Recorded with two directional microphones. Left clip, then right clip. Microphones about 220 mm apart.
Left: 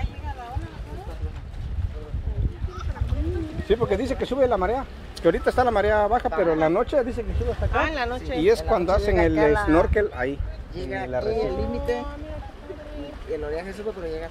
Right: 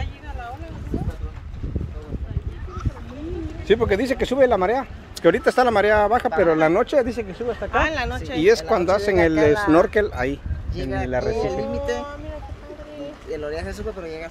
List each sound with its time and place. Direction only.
3.6 s speech: 30° right (ahead or behind)
7.7 s speech: 55° right (ahead or behind)
8.4 s speech: 25° right (ahead or behind); by 12.2 s 50° right (ahead or behind)
13.4 s speech: 45° right (ahead or behind)